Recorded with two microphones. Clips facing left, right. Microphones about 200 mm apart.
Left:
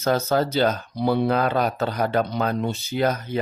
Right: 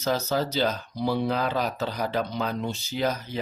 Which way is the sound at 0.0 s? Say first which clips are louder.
Left 5 dB; 55° left (ahead or behind).